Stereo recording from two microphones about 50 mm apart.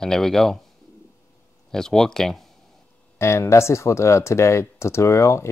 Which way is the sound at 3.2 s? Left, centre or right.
Left.